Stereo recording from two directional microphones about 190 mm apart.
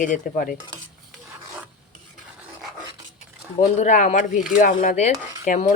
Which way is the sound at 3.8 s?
40° left (ahead or behind).